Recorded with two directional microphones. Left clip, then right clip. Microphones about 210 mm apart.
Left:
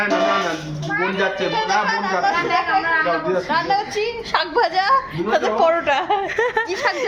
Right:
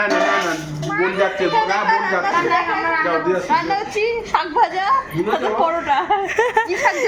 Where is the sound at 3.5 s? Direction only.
20° left (ahead or behind).